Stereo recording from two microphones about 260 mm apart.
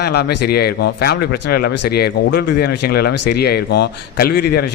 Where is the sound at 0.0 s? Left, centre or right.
Left.